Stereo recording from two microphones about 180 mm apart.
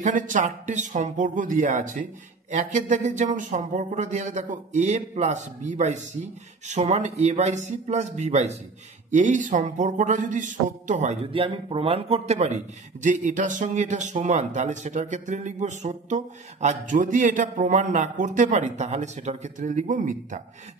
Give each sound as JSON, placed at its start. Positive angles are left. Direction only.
{"t": 0.0, "sound": "a man's voice", "side_deg": -45}